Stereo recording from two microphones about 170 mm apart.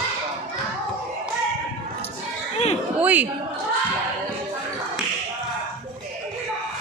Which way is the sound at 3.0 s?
10° right (ahead or behind).